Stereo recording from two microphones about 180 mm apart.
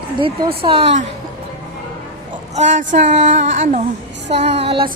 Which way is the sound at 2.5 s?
40° right (ahead or behind).